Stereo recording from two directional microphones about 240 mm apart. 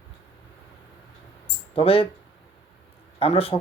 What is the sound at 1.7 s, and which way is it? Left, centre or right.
Speech, left.